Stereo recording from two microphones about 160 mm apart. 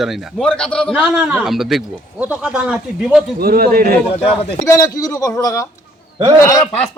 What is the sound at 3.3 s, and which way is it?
Speech, 70° right (ahead or behind).